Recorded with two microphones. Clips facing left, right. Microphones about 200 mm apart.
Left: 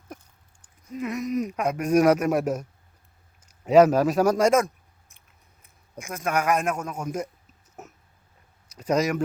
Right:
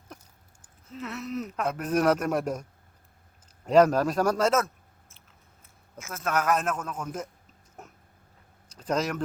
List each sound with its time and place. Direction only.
0.9 s a man's voice: 15° left (ahead or behind)
7.8 s a sound: 5° left (ahead or behind)
8.8 s speech: 10° left (ahead or behind)